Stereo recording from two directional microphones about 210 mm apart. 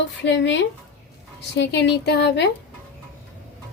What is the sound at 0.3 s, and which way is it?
A woman's voice, 60° left (ahead or behind).